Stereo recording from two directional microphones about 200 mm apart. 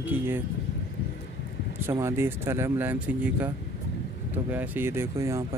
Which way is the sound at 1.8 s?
15° right (ahead or behind).